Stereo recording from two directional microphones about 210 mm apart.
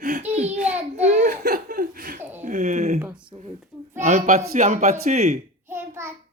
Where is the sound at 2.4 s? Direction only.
35° right (ahead or behind).